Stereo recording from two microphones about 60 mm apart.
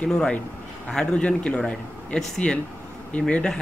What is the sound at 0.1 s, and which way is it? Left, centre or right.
Speech, centre.